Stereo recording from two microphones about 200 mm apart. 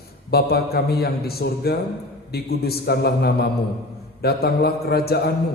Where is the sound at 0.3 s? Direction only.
50° left (ahead or behind).